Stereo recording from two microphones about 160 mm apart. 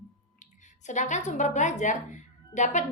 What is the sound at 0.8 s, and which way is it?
A woman's voice, 50° left (ahead or behind).